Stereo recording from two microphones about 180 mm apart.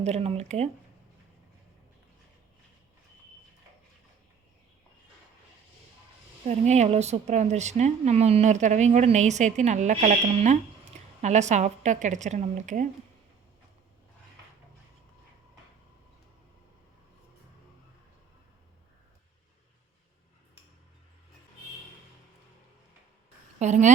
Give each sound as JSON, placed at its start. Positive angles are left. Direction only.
{"t": 0.0, "sound": "a woman's voice", "side_deg": -35}
{"t": 6.4, "sound": "a woman's voice", "side_deg": -40}
{"t": 23.6, "sound": "a woman's voice", "side_deg": -40}